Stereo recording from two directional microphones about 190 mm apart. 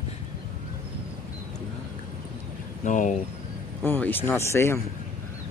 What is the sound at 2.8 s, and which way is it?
Speech, 40° left (ahead or behind).